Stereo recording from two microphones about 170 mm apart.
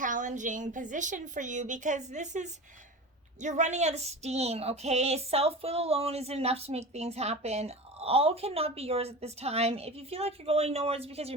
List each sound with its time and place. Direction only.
0.0 s a woman's voice: 50° right (ahead or behind)
3.4 s child singing: 45° right (ahead or behind)